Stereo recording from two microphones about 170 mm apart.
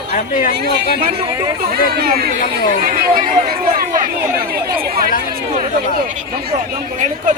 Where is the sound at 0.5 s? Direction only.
75° right (ahead or behind).